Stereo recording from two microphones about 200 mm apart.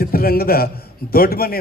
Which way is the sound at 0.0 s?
50° left (ahead or behind).